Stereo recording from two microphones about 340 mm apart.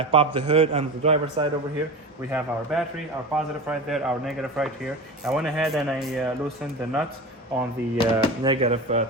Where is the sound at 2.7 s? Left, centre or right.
Centre.